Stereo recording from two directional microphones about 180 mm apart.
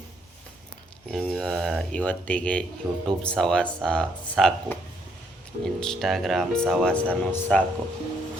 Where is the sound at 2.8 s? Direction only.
10° right (ahead or behind).